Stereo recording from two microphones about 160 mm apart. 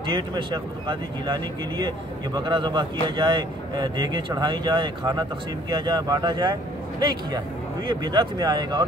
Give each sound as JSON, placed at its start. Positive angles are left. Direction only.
{"t": 0.1, "sound": "speech", "side_deg": -30}
{"t": 7.9, "sound": "speech", "side_deg": -25}